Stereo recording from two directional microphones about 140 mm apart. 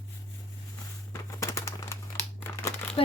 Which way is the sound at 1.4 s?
20° left (ahead or behind).